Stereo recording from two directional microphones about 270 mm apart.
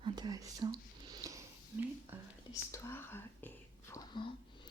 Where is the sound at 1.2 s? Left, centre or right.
Centre.